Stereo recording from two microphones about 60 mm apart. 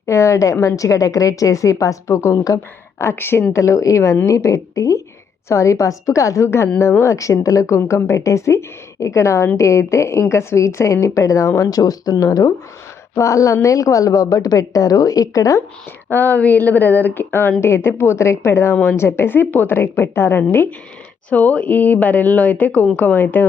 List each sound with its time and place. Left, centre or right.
0.0 s a woman's voice: left
3.0 s a woman's voice: left
3.5 s a woman's voice: left
7.8 s a woman's voice: left
13.1 s a woman's voice: left
16.0 s a woman's voice: left
21.2 s speech: left